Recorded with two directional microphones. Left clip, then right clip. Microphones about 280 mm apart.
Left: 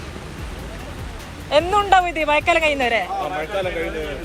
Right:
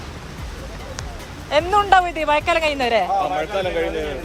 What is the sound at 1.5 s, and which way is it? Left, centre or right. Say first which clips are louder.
Speech: even; centre.